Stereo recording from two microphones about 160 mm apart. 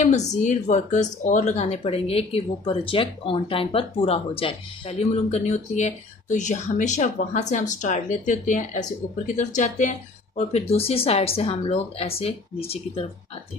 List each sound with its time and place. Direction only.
0.3 s speech: 45° left (ahead or behind)